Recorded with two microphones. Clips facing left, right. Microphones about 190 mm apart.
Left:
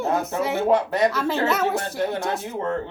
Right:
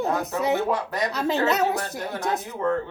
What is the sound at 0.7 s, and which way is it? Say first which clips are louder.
Speech: left 6 dB; 25° left (ahead or behind).